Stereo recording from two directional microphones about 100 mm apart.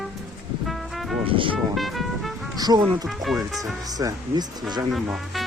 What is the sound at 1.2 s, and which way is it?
Music, 60° right (ahead or behind).